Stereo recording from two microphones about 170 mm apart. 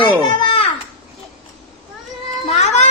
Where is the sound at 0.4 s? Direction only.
35° left (ahead or behind).